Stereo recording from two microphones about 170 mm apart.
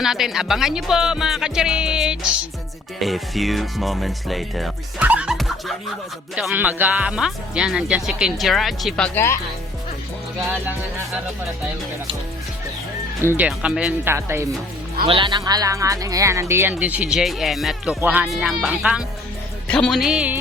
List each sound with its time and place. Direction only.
0.0 s speech: centre (ahead or behind); by 9.4 s 15° left (ahead or behind)
13.2 s speech: 10° right (ahead or behind)
15.0 s speech: 30° right (ahead or behind); by 19.0 s 5° right (ahead or behind)
19.6 s speech: 5° left (ahead or behind)